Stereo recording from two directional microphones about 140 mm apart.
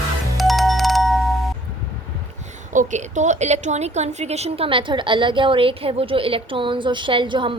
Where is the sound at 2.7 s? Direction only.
60° right (ahead or behind); by 7.5 s 35° right (ahead or behind).